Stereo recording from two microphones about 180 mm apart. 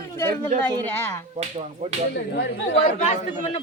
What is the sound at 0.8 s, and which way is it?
Speech, 15° left (ahead or behind).